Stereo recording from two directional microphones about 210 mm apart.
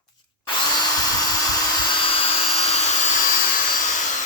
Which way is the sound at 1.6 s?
20° left (ahead or behind).